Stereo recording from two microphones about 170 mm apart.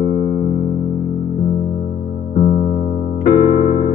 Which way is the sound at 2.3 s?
45° left (ahead or behind).